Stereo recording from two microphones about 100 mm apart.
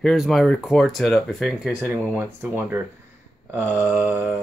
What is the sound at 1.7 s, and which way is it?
Speech, 15° right (ahead or behind).